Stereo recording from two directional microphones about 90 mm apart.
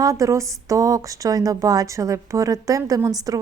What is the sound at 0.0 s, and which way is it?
A woman's voice, 40° right (ahead or behind).